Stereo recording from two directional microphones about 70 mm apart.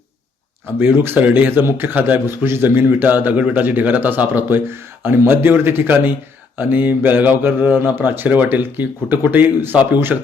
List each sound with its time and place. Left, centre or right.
0.8 s speech: right